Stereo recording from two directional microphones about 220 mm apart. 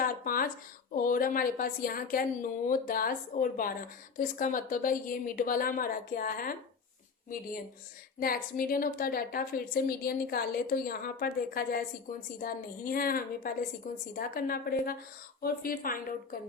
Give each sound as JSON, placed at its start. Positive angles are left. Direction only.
{"t": 0.3, "sound": "a woman's voice", "side_deg": 40}
{"t": 8.2, "sound": "a woman's voice", "side_deg": 40}